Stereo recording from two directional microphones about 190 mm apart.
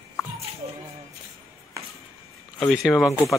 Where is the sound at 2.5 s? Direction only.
Centre (ahead or behind).